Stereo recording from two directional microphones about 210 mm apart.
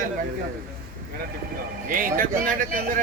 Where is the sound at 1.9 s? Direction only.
40° right (ahead or behind).